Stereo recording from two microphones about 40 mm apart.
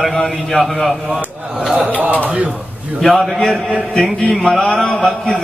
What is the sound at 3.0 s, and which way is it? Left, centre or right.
A man's voice, centre.